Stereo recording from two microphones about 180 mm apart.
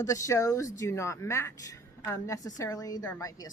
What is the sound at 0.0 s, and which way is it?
A woman's voice, 20° left (ahead or behind).